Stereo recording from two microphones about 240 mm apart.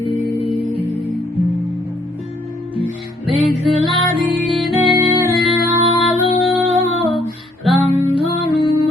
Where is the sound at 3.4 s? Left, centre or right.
Centre.